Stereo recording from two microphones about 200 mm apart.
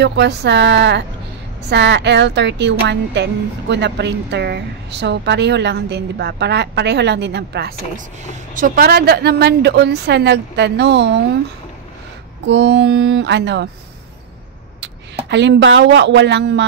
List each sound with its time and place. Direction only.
0.0 s a woman's voice: 60° right (ahead or behind)
8.5 s a woman's voice: 45° right (ahead or behind)
12.4 s a woman's voice: 60° right (ahead or behind)
15.2 s a woman's voice: 60° right (ahead or behind)